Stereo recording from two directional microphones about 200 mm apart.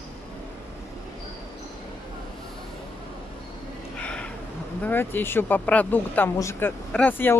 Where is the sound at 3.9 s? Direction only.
5° left (ahead or behind).